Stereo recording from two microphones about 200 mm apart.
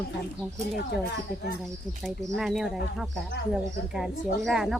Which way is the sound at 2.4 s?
Centre (ahead or behind).